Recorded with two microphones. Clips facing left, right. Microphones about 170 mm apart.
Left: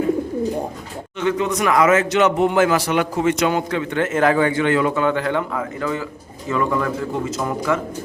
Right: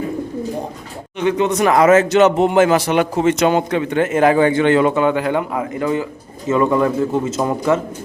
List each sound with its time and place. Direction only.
1.2 s speech: 20° right (ahead or behind)